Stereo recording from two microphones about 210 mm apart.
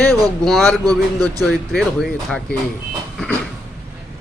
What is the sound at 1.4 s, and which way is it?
Speech, centre (ahead or behind).